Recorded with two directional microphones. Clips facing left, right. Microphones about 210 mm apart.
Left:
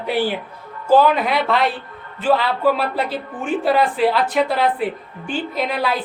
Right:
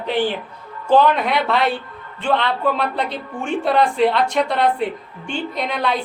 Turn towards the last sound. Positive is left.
turn(degrees=5)  # may be behind; listen again after turning